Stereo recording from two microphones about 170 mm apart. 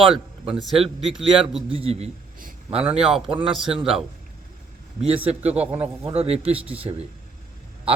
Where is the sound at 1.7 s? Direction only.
35° right (ahead or behind).